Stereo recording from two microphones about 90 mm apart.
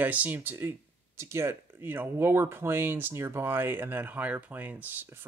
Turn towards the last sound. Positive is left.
turn(degrees=-20)  # may be behind; listen again after turning